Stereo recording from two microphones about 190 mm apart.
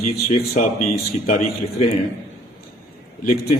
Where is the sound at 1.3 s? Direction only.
35° left (ahead or behind).